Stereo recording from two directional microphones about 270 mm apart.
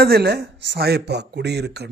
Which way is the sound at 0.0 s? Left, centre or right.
Right.